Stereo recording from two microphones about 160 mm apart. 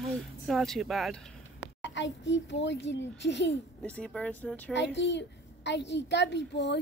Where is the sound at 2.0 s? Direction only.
90° left.